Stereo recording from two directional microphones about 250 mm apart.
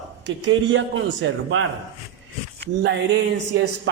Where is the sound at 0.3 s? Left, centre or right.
Right.